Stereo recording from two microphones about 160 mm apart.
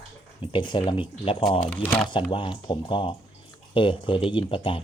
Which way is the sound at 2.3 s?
30° left (ahead or behind).